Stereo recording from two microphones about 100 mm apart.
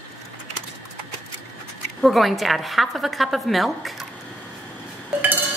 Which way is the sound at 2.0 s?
Centre (ahead or behind).